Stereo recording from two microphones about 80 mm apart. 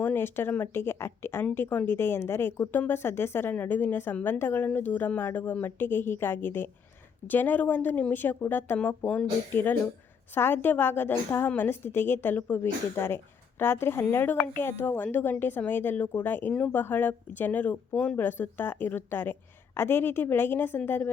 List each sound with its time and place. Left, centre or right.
0.0 s a woman's voice: left
17.9 s speech: centre
18.2 s a woman's voice: left